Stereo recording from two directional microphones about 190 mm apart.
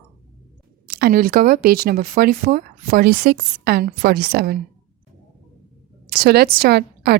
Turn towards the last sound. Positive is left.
turn(degrees=-55)  # may be behind; listen again after turning